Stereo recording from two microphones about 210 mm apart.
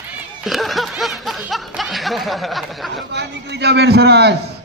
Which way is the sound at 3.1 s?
55° right (ahead or behind).